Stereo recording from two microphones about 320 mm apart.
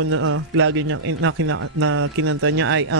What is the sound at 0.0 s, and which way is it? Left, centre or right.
A man's voice, right.